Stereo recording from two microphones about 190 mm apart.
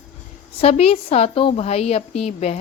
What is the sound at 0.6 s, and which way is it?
A woman's voice, 30° left (ahead or behind).